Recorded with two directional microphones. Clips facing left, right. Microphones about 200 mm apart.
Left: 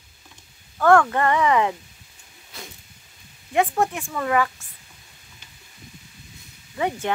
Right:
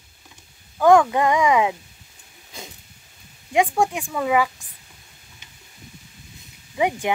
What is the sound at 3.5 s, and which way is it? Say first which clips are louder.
Speech: right 2 dB; 15° right (ahead or behind).